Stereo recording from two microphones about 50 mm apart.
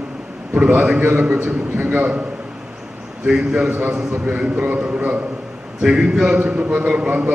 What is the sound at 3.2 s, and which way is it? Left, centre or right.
Speech, centre.